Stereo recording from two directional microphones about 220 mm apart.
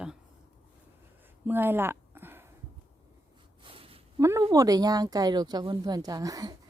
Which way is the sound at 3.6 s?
25° right (ahead or behind).